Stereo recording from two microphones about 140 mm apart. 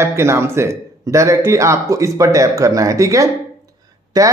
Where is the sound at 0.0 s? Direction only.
20° right (ahead or behind).